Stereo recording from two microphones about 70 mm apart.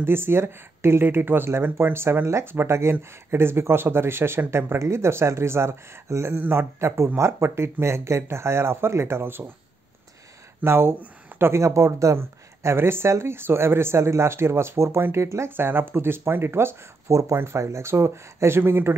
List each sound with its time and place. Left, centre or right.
0.0 s speech: right
6.3 s speech: right
10.6 s speech: right
12.2 s speech: right
17.1 s speech: right